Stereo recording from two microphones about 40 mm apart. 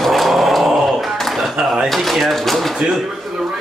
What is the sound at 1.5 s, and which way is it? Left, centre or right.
Drawer open or close, centre.